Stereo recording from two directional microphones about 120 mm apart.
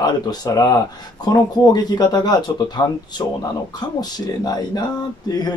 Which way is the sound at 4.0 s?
30° left (ahead or behind).